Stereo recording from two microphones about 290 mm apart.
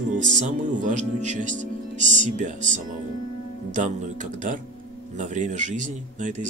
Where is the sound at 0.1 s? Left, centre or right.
Right.